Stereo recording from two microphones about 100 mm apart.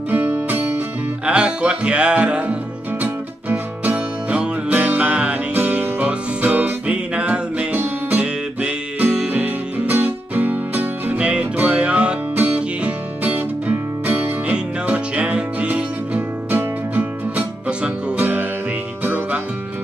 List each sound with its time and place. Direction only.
0.1 s music: 15° right (ahead or behind)